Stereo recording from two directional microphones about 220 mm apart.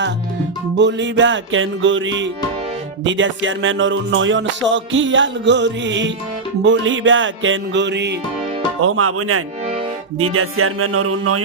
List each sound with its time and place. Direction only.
0.8 s music: 55° right (ahead or behind)
8.8 s music: 75° right (ahead or behind)